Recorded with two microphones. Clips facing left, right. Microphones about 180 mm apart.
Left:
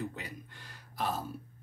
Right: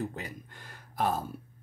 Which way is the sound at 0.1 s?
50° right (ahead or behind).